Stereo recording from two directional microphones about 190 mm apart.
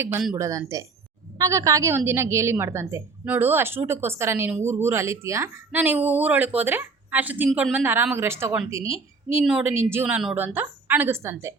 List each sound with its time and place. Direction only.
0.3 s a woman's voice: 15° right (ahead or behind)